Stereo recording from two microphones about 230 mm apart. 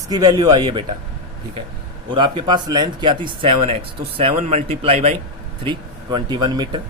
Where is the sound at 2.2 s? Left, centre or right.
Centre.